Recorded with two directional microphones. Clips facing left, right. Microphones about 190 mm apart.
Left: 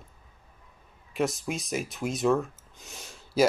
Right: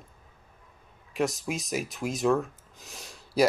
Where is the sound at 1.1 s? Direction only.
Centre (ahead or behind).